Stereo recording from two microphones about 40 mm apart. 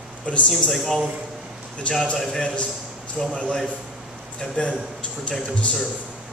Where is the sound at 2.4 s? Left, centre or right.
Left.